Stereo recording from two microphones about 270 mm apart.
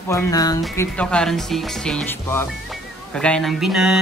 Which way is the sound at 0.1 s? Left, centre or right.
Centre.